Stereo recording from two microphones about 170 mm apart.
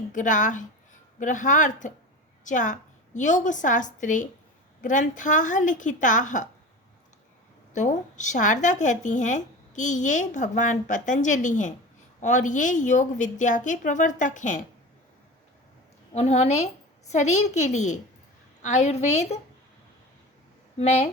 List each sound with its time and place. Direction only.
0.1 s a woman's voice: 50° left (ahead or behind)
7.7 s a woman's voice: 45° left (ahead or behind)
16.1 s a woman's voice: 40° left (ahead or behind)
20.7 s a woman's voice: 40° left (ahead or behind)